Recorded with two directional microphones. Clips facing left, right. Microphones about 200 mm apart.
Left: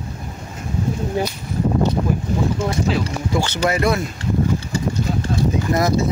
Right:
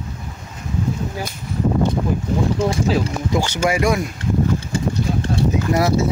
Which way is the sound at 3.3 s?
15° right (ahead or behind).